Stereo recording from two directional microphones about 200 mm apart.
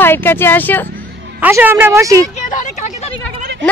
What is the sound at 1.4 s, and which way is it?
Speech, 10° right (ahead or behind).